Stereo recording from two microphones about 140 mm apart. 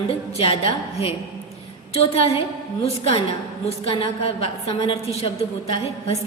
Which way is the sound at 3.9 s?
40° left (ahead or behind).